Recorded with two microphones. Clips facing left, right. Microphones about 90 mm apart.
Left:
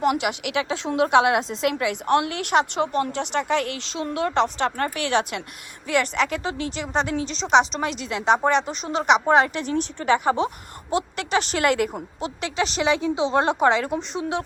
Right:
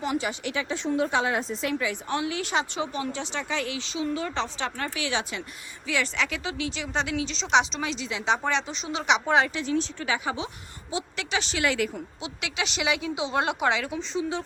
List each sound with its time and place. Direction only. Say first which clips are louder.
0.0 s a woman's voice: left 6 dB; 75° left (ahead or behind); by 7.4 s 40° left (ahead or behind)
7.8 s a woman's voice: left 4 dB; 50° left (ahead or behind)
14.1 s a woman's voice: left 2 dB; 65° left (ahead or behind)